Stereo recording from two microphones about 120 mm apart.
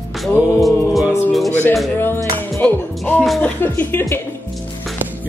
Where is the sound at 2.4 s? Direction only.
15° left (ahead or behind).